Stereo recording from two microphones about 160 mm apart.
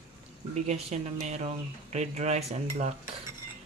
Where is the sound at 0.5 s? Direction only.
45° right (ahead or behind).